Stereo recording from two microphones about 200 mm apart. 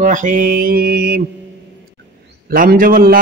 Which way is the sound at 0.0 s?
40° right (ahead or behind).